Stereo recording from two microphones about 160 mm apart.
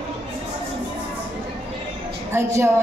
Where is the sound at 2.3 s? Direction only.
15° right (ahead or behind).